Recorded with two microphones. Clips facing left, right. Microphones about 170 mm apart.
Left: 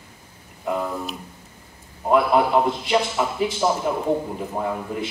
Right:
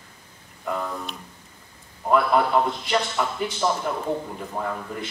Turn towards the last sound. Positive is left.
turn(degrees=10)  # may be behind; listen again after turning